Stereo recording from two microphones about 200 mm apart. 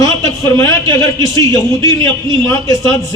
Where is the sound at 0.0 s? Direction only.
15° left (ahead or behind).